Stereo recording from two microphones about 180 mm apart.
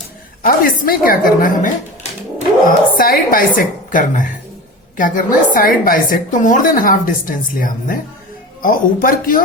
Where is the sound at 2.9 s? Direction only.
55° left (ahead or behind).